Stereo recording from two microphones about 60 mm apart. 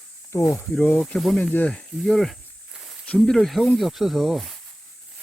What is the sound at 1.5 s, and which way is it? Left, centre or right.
Speech, left.